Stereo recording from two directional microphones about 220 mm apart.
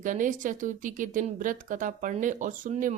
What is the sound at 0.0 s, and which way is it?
Speech, 35° right (ahead or behind).